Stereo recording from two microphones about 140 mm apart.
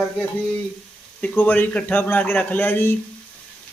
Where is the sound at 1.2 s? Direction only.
15° left (ahead or behind).